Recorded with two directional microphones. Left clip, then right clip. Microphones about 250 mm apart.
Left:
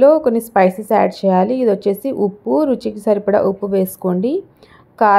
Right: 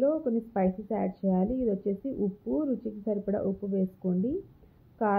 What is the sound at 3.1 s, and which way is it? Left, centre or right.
Speech, left.